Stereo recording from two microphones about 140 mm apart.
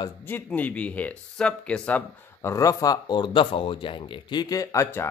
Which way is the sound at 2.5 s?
25° left (ahead or behind).